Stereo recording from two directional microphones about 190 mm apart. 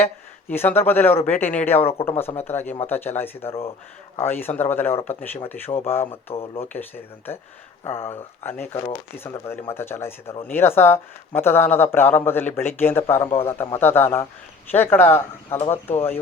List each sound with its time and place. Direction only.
0.0 s a man's voice: 10° left (ahead or behind)
1.8 s speech: 30° left (ahead or behind)
2.0 s a man's voice: 10° left (ahead or behind)
6.3 s speech: 30° left (ahead or behind)
6.7 s a man's voice: 10° left (ahead or behind)